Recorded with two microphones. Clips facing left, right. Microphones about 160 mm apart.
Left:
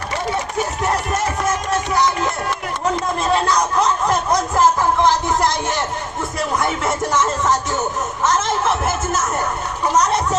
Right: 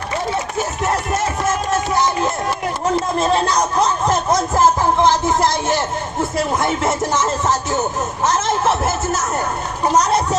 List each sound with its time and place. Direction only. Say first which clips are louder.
2.5 s a sound: right 2 dB; 30° right (ahead or behind)
6.3 s music: right 1 dB; 30° right (ahead or behind)
8.2 s speech: right 1 dB; 30° right (ahead or behind)